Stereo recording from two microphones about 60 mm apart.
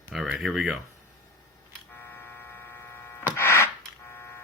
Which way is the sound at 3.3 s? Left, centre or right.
Left.